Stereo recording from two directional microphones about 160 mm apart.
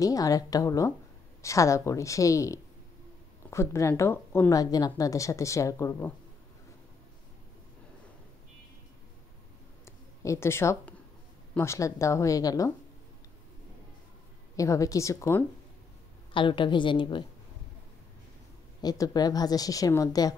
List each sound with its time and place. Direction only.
0.0 s speech: 20° left (ahead or behind)
9.8 s a sound: 20° left (ahead or behind)
11.5 s speech: 15° left (ahead or behind)
14.6 s speech: 20° left (ahead or behind)
16.3 s a woman's voice: 30° left (ahead or behind)
18.8 s speech: 25° left (ahead or behind)